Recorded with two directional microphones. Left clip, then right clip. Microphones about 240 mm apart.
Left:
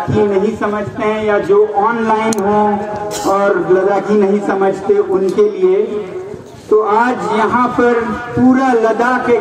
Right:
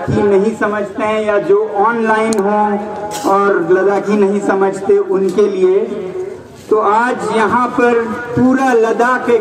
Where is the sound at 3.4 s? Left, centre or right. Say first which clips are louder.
Left 1 dB; right.